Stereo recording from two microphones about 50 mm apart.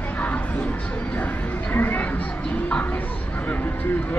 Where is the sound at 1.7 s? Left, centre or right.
Left.